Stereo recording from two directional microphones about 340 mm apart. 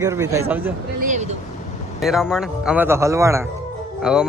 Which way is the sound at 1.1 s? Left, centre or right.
Centre.